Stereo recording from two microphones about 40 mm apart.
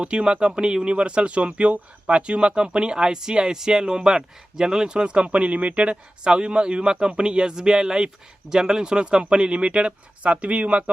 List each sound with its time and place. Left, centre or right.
0.0 s speech: right